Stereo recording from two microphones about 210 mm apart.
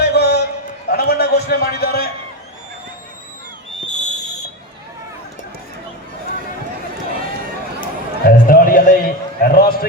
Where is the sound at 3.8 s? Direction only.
35° left (ahead or behind).